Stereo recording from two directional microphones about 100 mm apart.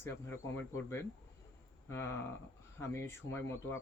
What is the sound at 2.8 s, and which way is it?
Speech, 25° left (ahead or behind).